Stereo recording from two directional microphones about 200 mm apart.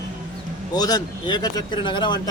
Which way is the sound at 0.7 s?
20° left (ahead or behind).